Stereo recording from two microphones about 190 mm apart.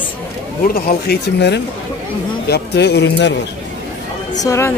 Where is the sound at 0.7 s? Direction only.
55° left (ahead or behind).